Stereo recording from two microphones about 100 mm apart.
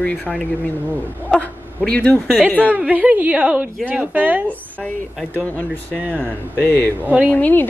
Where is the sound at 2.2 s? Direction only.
5° right (ahead or behind).